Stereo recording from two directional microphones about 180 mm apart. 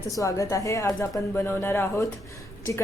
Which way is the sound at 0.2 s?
15° left (ahead or behind).